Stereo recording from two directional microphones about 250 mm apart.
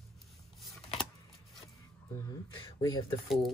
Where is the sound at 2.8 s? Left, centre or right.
Centre.